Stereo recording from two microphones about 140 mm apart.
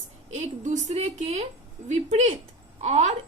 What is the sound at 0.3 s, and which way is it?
A woman's voice, 55° right (ahead or behind).